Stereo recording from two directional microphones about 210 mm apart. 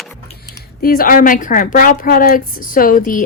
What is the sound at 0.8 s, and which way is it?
A woman's voice, 45° left (ahead or behind).